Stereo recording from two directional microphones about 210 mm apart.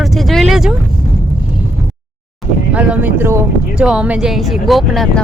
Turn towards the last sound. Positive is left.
turn(degrees=0)  # may be behind; listen again after turning